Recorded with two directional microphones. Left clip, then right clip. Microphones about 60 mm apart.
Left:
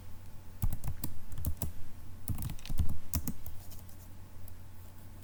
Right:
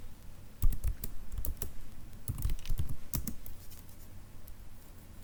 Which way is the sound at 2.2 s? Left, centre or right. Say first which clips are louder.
Left 2 dB; centre.